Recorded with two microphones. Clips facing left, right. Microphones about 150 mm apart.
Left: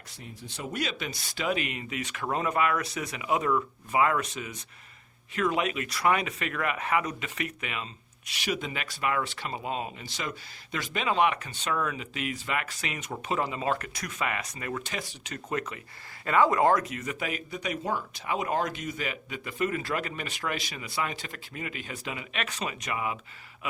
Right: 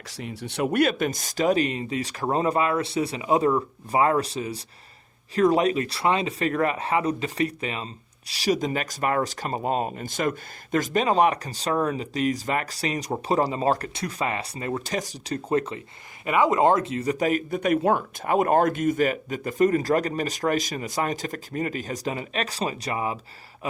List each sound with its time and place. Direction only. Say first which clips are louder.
0.1 s speech: right 10 dB; 85° right; by 15.8 s 30° right (ahead or behind)
16.2 s speech: right 3 dB; 15° right (ahead or behind); by 23.1 s 35° right (ahead or behind)